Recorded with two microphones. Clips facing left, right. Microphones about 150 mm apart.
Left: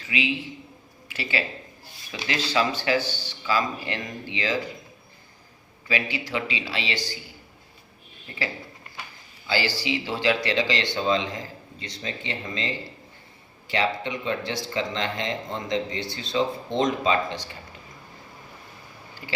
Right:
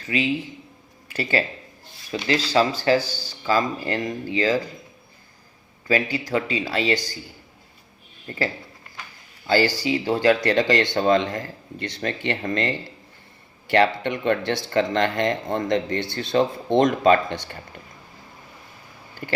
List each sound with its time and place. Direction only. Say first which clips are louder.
0.0 s speech: right 4 dB; 45° right (ahead or behind)
5.9 s speech: right 6 dB; 45° right (ahead or behind)
8.3 s speech: right 7 dB; 45° right (ahead or behind)
9.5 s speech: right 6 dB; 45° right (ahead or behind)
19.2 s a sound: right 6 dB; 55° right (ahead or behind)